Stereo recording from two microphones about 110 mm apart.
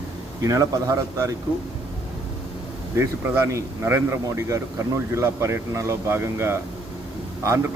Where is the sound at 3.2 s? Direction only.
20° right (ahead or behind).